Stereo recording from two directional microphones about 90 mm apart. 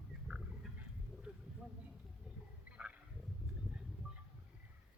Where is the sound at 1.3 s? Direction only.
15° right (ahead or behind).